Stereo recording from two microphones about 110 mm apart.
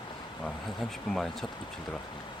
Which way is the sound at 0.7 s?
5° left (ahead or behind).